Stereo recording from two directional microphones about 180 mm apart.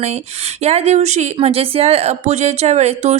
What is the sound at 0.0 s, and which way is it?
Speech, 35° right (ahead or behind).